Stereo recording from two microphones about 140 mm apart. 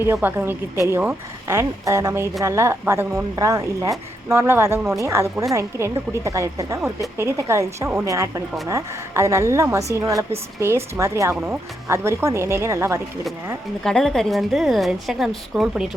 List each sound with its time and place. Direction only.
0.0 s speech: 15° right (ahead or behind)
13.8 s a woman's voice: 5° left (ahead or behind)